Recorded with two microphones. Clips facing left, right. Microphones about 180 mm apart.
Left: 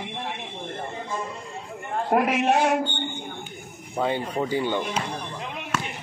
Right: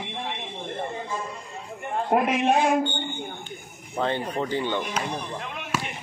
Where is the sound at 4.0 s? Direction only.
5° left (ahead or behind).